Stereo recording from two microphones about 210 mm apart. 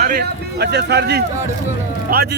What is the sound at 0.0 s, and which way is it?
Speech, 45° right (ahead or behind).